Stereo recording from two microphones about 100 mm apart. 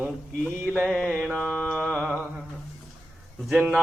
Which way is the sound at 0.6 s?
20° right (ahead or behind).